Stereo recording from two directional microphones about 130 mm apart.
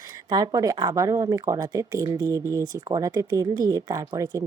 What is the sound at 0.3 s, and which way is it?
Speech, 30° right (ahead or behind).